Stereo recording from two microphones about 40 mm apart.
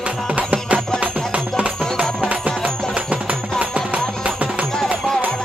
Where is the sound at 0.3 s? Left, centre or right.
Right.